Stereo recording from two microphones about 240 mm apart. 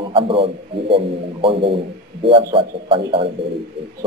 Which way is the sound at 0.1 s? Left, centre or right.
Right.